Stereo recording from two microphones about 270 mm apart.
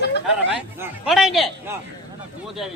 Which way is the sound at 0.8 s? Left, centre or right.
Centre.